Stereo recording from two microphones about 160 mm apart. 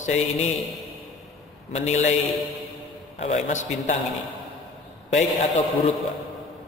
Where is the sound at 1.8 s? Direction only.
45° left (ahead or behind).